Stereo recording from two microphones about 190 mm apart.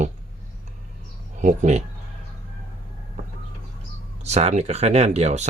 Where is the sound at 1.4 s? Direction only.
40° right (ahead or behind).